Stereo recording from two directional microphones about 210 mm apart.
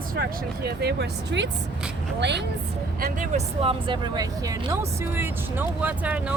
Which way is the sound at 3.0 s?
35° right (ahead or behind).